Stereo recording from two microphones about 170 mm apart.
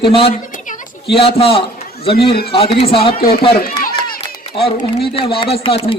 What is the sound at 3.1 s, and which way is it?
Speech, 60° left (ahead or behind).